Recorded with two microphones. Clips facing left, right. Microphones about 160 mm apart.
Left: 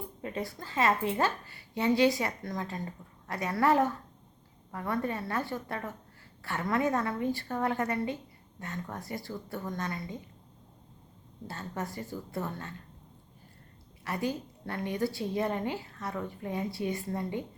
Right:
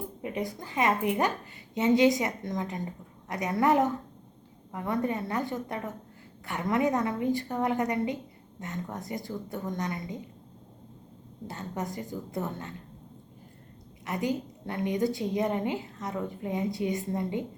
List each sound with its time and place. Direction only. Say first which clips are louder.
0.2 s a woman's voice: right 3 dB; 15° right (ahead or behind)
11.4 s a woman's voice: right 2 dB; 20° right (ahead or behind)
14.0 s a woman's voice: right 3 dB; 20° right (ahead or behind)